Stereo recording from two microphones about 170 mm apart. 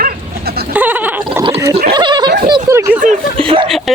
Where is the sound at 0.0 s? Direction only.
65° right (ahead or behind).